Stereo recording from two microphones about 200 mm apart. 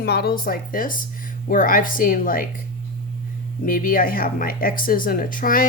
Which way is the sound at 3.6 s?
45° left (ahead or behind).